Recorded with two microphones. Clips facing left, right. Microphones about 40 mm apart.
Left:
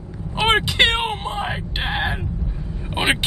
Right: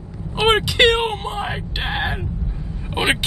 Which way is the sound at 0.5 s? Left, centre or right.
Centre.